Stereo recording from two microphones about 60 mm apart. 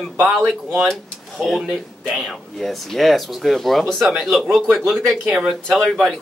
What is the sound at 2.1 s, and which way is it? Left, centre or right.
Speech, centre.